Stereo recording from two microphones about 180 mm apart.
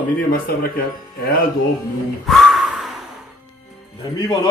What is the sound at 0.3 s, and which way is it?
Speech, 55° left (ahead or behind).